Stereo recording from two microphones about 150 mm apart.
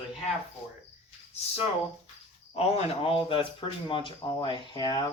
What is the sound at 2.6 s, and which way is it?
Speech, 35° left (ahead or behind).